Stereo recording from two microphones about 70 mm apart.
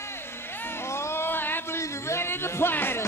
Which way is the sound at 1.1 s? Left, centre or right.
Left.